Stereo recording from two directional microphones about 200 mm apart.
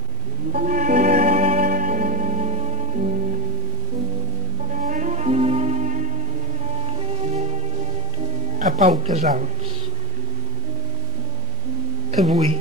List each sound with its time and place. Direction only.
0.5 s music: 40° right (ahead or behind)
4.7 s music: 40° right (ahead or behind)
8.5 s speech: 35° right (ahead or behind)